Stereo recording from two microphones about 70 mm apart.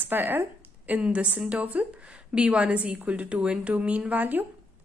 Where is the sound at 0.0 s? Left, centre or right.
Right.